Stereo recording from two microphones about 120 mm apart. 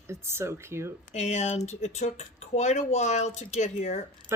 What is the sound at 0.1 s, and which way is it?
Speech, 20° right (ahead or behind).